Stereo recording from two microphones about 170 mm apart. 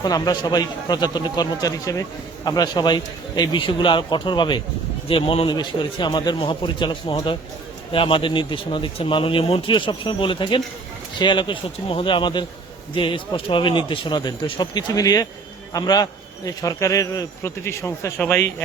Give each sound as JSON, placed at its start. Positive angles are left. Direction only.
{"t": 0.0, "sound": "a man's voice", "side_deg": 25}